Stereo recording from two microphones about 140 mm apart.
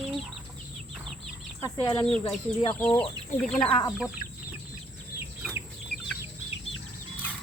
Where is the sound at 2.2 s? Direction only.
30° left (ahead or behind).